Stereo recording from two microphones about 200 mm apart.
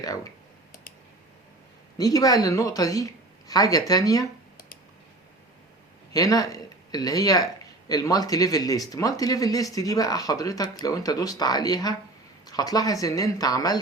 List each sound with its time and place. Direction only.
2.0 s speech: 15° left (ahead or behind)
6.1 s speech: 20° left (ahead or behind)